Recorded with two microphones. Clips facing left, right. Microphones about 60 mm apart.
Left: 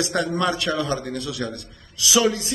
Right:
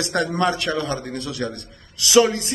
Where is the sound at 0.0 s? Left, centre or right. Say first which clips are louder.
Right 1 dB; right.